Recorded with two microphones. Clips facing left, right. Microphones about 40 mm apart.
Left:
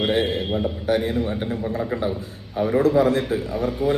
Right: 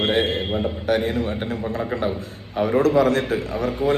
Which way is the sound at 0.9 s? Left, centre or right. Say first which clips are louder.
Even; right.